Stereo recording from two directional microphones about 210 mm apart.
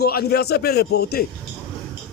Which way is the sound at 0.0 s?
50° left (ahead or behind).